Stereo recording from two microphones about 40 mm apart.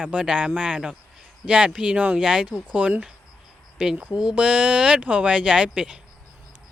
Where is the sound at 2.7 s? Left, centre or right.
Right.